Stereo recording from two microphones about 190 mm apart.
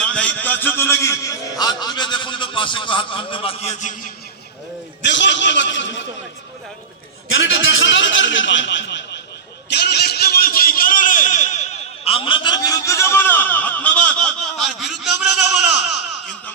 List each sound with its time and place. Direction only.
0.0 s a man's voice: 5° left (ahead or behind); by 3.9 s 40° left (ahead or behind)
5.0 s speech: 70° left (ahead or behind)
7.7 s speech: 75° left (ahead or behind)
9.6 s a sound: 60° left (ahead or behind); by 15.6 s centre (ahead or behind)